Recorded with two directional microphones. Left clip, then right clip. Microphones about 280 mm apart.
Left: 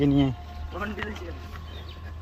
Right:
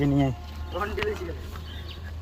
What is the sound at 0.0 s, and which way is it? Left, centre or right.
Speech, centre.